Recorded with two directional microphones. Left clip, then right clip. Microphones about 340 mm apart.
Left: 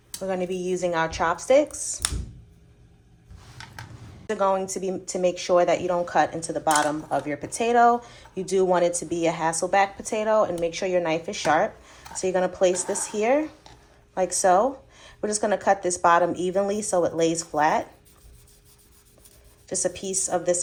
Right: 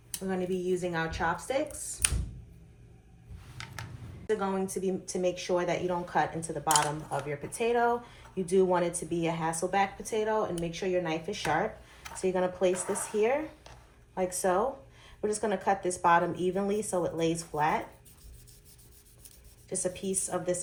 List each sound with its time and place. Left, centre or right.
0.3 s a woman's voice: centre
4.4 s a woman's voice: centre
19.6 s a woman's voice: left